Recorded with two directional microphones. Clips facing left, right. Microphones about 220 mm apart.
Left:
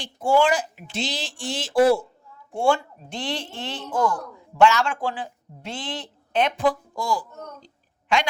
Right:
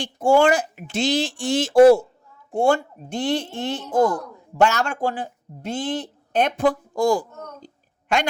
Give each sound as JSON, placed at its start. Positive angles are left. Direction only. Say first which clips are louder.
{"t": 0.0, "sound": "speech", "louder": "right 3 dB", "side_deg": -45}